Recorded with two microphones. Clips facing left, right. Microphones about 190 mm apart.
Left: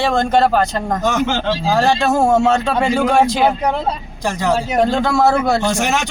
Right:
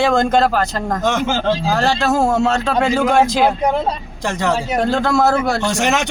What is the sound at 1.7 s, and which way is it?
Speech, 15° left (ahead or behind).